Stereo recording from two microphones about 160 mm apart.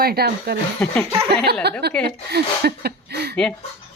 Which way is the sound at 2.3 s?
85° right.